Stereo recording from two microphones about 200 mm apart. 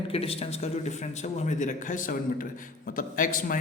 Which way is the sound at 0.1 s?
30° left (ahead or behind).